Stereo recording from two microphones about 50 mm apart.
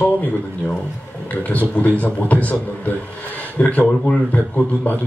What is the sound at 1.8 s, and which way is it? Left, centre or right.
Speech, left.